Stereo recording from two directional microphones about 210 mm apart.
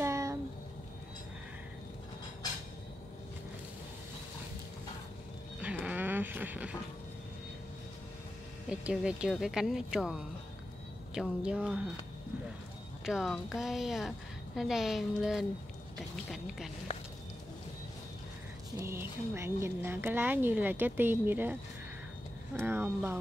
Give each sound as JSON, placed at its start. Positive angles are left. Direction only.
{"t": 0.0, "sound": "a sound", "side_deg": -15}
{"t": 5.6, "sound": "livestock", "side_deg": -5}
{"t": 8.6, "sound": "a woman's voice", "side_deg": -5}
{"t": 13.0, "sound": "a woman's voice", "side_deg": 0}
{"t": 18.8, "sound": "speech", "side_deg": -10}